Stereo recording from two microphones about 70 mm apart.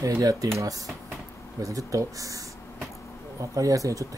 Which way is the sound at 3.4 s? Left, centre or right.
Right.